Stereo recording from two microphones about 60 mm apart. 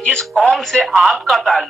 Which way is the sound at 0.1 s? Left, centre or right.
Centre.